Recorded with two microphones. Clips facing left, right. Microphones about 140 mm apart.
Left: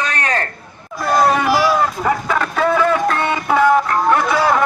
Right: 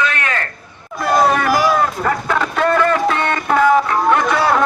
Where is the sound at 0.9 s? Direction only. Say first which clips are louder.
Even; centre (ahead or behind).